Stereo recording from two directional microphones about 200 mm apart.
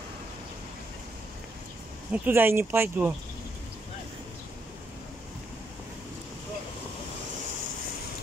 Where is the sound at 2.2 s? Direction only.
10° right (ahead or behind).